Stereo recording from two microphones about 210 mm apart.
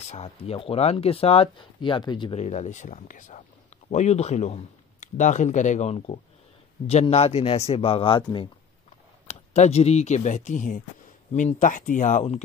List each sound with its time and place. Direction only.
0.0 s speech: 30° left (ahead or behind)
2.4 s speech: 35° left (ahead or behind)